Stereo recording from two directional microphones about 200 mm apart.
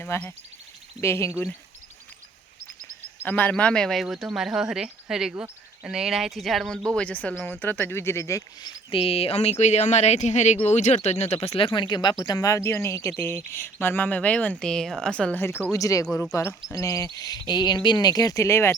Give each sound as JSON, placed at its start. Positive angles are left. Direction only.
{"t": 0.0, "sound": "speech", "side_deg": 10}
{"t": 3.2, "sound": "speech", "side_deg": 10}
{"t": 16.0, "sound": "speech", "side_deg": 5}